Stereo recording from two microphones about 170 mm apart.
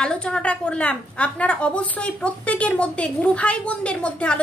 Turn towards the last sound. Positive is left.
turn(degrees=5)  # may be behind; listen again after turning